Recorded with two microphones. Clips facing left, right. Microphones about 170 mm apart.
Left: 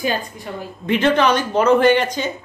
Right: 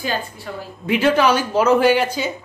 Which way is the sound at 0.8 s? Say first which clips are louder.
Even; 5° right (ahead or behind).